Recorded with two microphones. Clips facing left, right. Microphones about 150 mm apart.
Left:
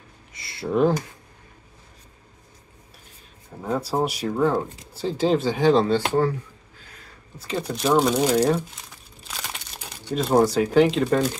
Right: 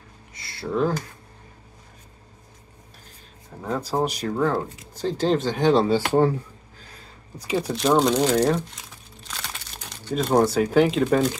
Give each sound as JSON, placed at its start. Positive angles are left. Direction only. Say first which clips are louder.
{"t": 0.3, "sound": "a sound", "louder": "left 2 dB", "side_deg": 25}
{"t": 3.6, "sound": "speech", "louder": "left 1 dB", "side_deg": 5}
{"t": 7.3, "sound": "speech", "louder": "right 3 dB", "side_deg": -10}